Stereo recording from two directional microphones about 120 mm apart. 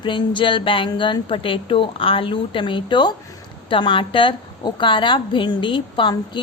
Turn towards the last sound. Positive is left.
turn(degrees=45)  # may be behind; listen again after turning